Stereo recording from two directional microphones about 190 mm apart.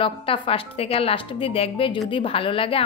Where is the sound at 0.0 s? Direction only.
30° left (ahead or behind).